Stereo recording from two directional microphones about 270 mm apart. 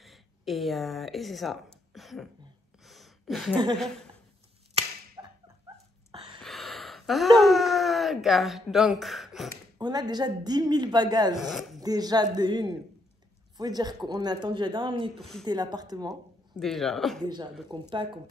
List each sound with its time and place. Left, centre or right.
0.0 s speech: centre
2.8 s gasp: centre
3.7 s speech: centre
4.7 s a sound: centre
6.4 s speech: centre
9.8 s speech: centre
11.3 s speech: centre
11.8 s speech: centre
15.1 s speech: centre
15.4 s speech: centre
16.5 s speech: centre
17.6 s speech: centre